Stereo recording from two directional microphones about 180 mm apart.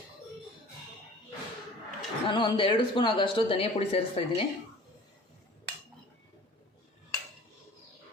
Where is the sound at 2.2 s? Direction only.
25° left (ahead or behind).